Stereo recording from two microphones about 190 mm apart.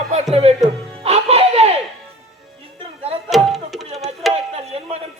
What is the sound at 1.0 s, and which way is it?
Music, 30° right (ahead or behind).